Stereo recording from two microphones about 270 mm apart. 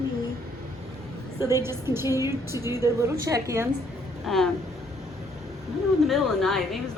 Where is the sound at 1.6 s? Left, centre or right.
Centre.